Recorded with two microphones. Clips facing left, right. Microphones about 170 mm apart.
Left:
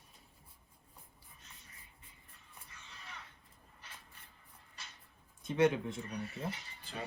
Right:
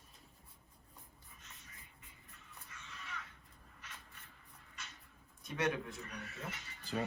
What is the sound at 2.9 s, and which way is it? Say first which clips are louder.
Crow: right 4 dB; 35° left (ahead or behind).